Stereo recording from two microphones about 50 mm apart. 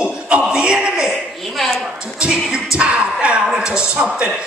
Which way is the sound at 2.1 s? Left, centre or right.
Centre.